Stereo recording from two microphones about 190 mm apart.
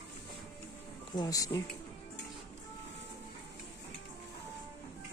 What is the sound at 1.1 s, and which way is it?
Speech, 20° left (ahead or behind).